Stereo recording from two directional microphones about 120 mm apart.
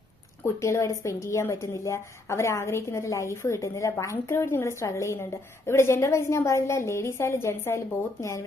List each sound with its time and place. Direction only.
0.4 s speech: 25° left (ahead or behind)